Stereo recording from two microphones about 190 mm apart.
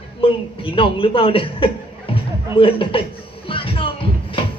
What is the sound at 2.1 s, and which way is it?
Music, 30° left (ahead or behind).